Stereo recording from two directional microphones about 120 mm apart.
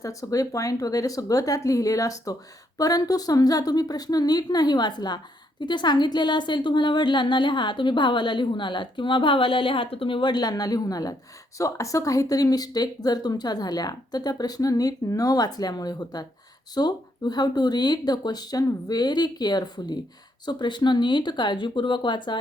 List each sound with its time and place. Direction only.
0.0 s a woman's voice: 25° left (ahead or behind)